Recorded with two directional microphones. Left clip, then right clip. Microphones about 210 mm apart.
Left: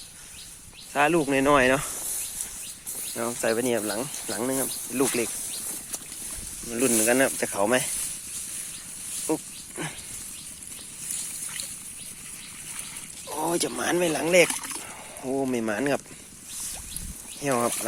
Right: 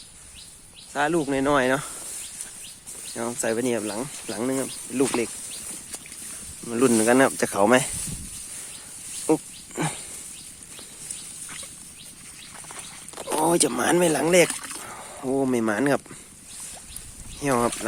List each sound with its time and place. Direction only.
0.9 s speech: 5° right (ahead or behind)
3.2 s speech: 20° right (ahead or behind)
7.0 s speech: 30° right (ahead or behind)
9.2 s pig: 30° right (ahead or behind)
13.2 s speech: 30° right (ahead or behind)
17.4 s speech: 30° right (ahead or behind)